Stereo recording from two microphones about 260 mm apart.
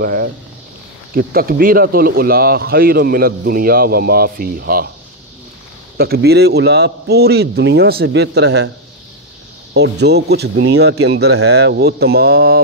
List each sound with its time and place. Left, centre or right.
0.0 s speech: right
5.9 s speech: right
9.8 s speech: right